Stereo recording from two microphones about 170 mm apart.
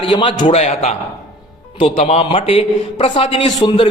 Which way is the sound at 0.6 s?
45° left (ahead or behind).